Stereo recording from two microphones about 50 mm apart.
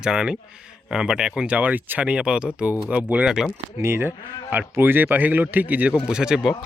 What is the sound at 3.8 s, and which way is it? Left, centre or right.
Speech, right.